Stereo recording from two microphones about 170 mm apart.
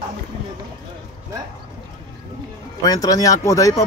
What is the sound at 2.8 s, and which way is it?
Speech, 20° left (ahead or behind).